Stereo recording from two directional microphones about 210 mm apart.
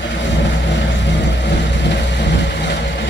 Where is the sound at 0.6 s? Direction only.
55° left (ahead or behind).